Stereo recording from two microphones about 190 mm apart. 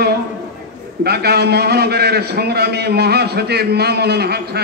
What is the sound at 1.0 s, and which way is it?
A man's voice, 55° right (ahead or behind).